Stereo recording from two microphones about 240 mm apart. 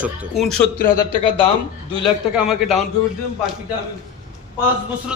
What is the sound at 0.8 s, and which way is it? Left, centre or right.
Speech, left.